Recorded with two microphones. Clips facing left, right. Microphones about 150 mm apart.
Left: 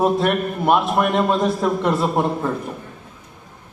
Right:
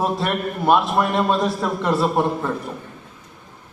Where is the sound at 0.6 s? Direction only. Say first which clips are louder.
Even; 20° left (ahead or behind).